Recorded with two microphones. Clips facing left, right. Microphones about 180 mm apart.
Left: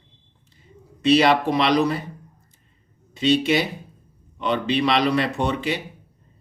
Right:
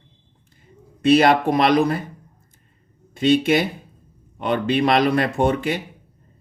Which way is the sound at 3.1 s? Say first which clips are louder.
Right 2 dB; 50° right (ahead or behind).